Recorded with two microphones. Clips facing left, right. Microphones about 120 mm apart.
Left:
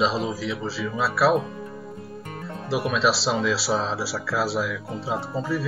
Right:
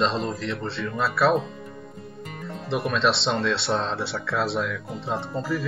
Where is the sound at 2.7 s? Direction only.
5° left (ahead or behind).